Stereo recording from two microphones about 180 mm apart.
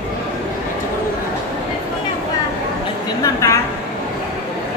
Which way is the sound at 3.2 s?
15° left (ahead or behind).